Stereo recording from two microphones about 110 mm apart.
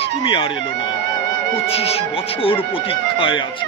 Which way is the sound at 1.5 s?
65° left (ahead or behind).